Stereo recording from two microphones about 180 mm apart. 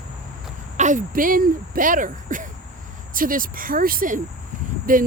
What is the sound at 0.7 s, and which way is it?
Speech, 45° right (ahead or behind).